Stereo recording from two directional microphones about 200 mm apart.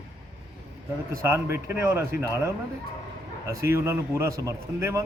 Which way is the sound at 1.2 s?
10° right (ahead or behind).